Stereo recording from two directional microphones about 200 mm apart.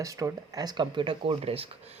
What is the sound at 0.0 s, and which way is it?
Speech, 15° right (ahead or behind).